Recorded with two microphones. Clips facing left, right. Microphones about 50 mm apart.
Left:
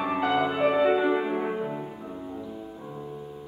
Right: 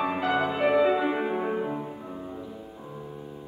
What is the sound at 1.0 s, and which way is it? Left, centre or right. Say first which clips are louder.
Music: left 2 dB; centre.